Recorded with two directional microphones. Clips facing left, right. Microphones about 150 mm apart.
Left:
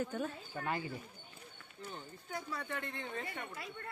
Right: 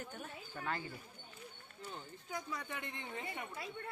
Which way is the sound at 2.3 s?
15° right (ahead or behind).